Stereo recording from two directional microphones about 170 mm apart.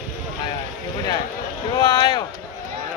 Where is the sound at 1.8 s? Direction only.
25° left (ahead or behind).